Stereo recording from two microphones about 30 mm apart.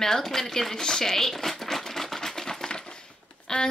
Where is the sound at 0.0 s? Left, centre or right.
Centre.